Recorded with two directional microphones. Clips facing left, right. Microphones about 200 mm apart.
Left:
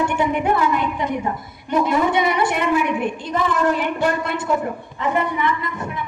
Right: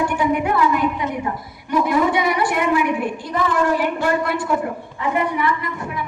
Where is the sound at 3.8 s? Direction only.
20° left (ahead or behind).